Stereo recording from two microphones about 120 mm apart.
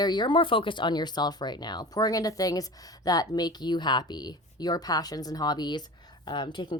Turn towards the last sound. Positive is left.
turn(degrees=40)  # may be behind; listen again after turning